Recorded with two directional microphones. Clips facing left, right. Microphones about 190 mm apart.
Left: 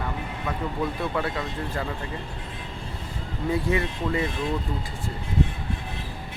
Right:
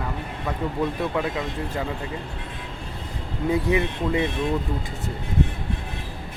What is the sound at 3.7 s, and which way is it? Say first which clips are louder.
Speech: right 3 dB; 20° right (ahead or behind).